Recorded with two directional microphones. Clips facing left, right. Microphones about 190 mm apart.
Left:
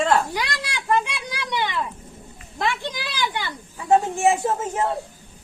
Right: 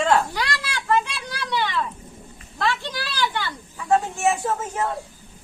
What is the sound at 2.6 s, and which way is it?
A woman's voice, 15° left (ahead or behind).